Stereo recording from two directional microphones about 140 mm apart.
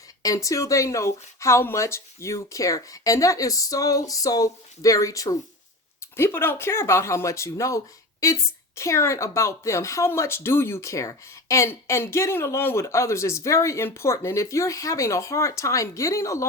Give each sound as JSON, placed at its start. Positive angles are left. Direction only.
{"t": 0.2, "sound": "a woman's voice", "side_deg": 25}